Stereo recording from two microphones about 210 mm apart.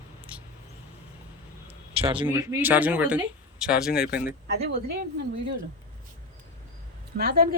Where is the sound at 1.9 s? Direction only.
25° right (ahead or behind).